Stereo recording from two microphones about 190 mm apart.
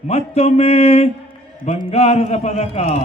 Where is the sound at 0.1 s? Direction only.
35° left (ahead or behind).